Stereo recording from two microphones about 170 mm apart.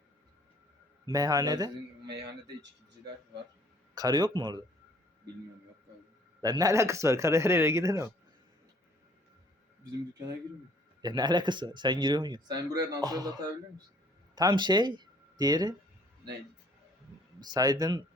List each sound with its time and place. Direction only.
1.1 s speech: 20° right (ahead or behind)
3.9 s speech: 25° right (ahead or behind)
6.4 s a man's voice: 20° right (ahead or behind)
11.0 s speech: 25° right (ahead or behind)
17.4 s speech: 25° right (ahead or behind)